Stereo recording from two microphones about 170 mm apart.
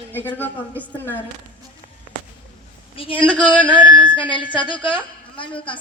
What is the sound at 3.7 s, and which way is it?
A woman's voice, 30° left (ahead or behind).